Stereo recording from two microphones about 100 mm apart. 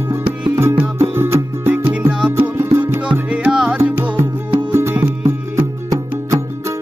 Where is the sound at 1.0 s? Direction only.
25° right (ahead or behind).